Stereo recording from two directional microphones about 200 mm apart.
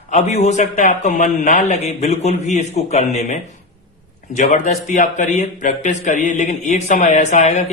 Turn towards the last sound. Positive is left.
turn(degrees=35)  # may be behind; listen again after turning